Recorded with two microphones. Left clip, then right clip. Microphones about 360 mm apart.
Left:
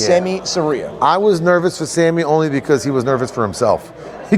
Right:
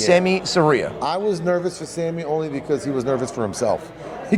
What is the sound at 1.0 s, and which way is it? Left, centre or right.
A man's voice, left.